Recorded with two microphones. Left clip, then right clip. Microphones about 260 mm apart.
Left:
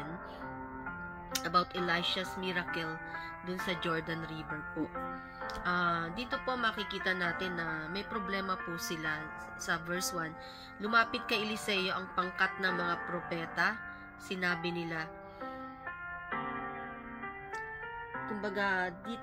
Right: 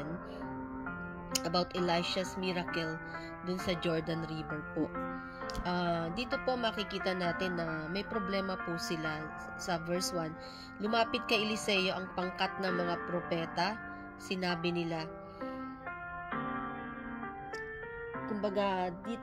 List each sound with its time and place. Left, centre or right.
1.4 s speech: left
5.6 s speech: left
9.8 s speech: centre
10.8 s speech: left
18.4 s speech: left